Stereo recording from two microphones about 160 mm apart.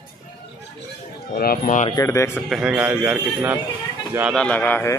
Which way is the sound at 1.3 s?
60° left (ahead or behind).